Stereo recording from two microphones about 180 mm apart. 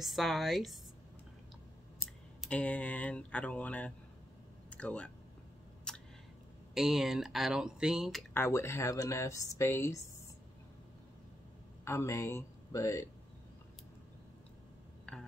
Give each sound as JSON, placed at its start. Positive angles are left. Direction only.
{"t": 0.0, "sound": "speech", "side_deg": 0}
{"t": 2.4, "sound": "speech", "side_deg": 5}
{"t": 5.9, "sound": "a sound", "side_deg": 5}
{"t": 6.7, "sound": "speech", "side_deg": 0}
{"t": 8.4, "sound": "speech", "side_deg": 15}
{"t": 11.8, "sound": "speech", "side_deg": 15}